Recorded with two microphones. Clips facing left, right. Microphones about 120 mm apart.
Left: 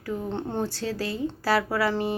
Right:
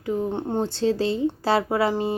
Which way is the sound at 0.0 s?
15° right (ahead or behind).